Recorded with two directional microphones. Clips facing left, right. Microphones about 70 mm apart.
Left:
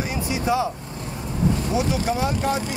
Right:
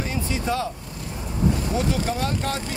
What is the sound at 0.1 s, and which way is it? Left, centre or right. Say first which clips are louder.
Vehicle: left 4 dB; centre.